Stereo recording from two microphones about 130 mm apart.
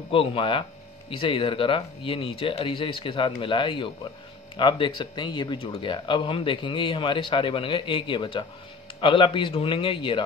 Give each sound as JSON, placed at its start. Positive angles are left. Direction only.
{"t": 0.1, "sound": "speech", "side_deg": 45}